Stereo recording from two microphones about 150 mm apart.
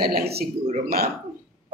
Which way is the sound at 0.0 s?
90° right.